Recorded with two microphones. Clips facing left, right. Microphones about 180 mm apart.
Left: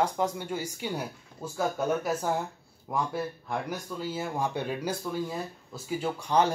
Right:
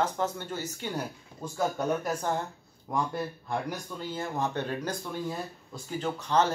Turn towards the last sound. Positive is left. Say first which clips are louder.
# left 1 dB
turn(degrees=10)  # may be behind; listen again after turning